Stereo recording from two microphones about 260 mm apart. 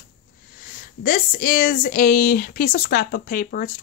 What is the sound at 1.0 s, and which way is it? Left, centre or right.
Speech, left.